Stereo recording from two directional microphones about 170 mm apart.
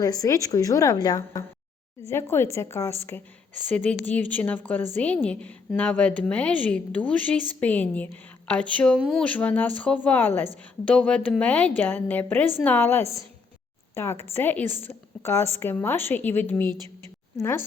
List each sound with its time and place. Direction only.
0.0 s a woman's voice: 20° left (ahead or behind)
14.6 s a woman's voice: 45° right (ahead or behind)
14.8 s a woman's voice: 15° left (ahead or behind)